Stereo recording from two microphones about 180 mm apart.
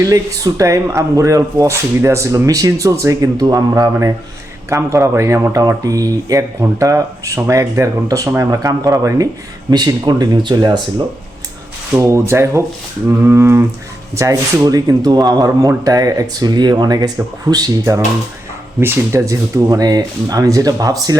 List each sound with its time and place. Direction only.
0.0 s speech: 20° right (ahead or behind)
11.9 s speech: 15° right (ahead or behind)